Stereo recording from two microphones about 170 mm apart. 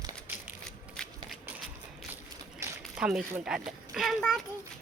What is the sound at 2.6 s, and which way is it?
Crumpling, 15° right (ahead or behind).